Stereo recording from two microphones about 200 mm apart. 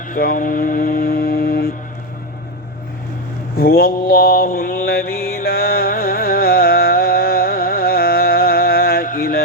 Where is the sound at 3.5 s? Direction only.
50° left (ahead or behind).